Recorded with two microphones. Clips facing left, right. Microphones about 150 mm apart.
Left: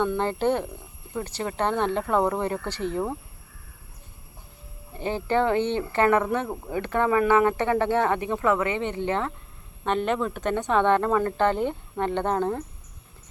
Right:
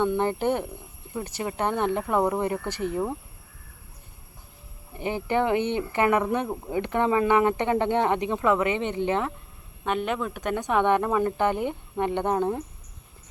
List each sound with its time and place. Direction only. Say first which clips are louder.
0.0 s speech: even; 15° right (ahead or behind)
4.9 s speech: left 1 dB; 15° right (ahead or behind)
9.8 s speech: left 2 dB; 5° right (ahead or behind)